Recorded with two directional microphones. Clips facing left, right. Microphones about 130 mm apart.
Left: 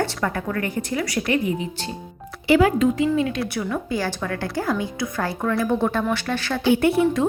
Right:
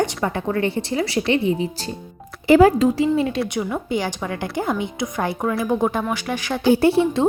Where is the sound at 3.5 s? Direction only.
20° right (ahead or behind).